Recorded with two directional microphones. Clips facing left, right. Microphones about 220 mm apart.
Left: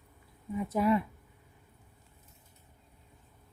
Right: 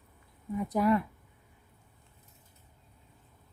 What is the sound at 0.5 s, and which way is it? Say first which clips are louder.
Speech: right 1 dB; centre (ahead or behind).